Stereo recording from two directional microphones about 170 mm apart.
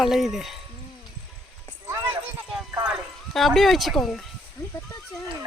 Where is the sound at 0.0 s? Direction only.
Centre (ahead or behind).